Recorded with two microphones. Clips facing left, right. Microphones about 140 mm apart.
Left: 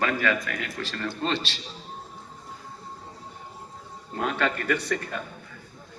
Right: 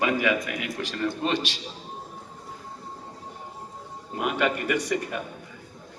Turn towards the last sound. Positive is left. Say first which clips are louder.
# right 1 dB
turn(degrees=-15)  # may be behind; listen again after turning